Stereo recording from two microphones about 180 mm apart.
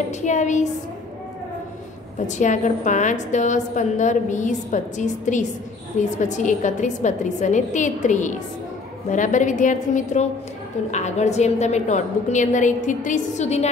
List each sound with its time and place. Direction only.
0.1 s a woman's voice: 40° left (ahead or behind)
2.2 s a woman's voice: 40° left (ahead or behind)